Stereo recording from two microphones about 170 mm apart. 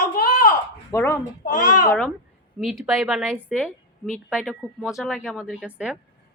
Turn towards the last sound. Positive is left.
turn(degrees=-5)  # may be behind; listen again after turning